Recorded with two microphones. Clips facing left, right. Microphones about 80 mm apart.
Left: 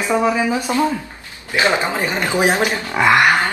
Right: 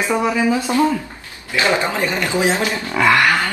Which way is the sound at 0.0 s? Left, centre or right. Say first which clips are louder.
Left 1 dB; centre.